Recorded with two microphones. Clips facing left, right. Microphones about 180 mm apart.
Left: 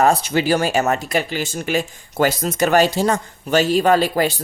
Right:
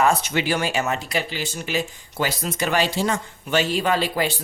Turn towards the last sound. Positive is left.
turn(degrees=45)  # may be behind; listen again after turning